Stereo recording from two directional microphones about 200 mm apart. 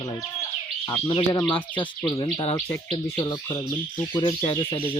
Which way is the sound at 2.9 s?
20° left (ahead or behind).